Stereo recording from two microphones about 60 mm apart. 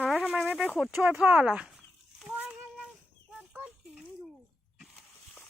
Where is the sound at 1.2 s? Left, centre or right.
Right.